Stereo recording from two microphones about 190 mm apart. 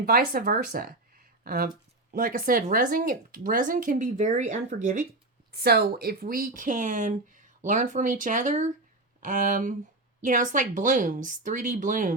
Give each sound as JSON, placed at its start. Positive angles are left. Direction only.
{"t": 0.0, "sound": "speech", "side_deg": -50}
{"t": 5.5, "sound": "speech", "side_deg": -55}